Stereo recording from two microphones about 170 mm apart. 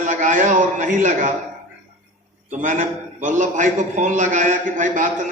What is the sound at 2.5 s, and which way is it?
A man's voice, 50° right (ahead or behind).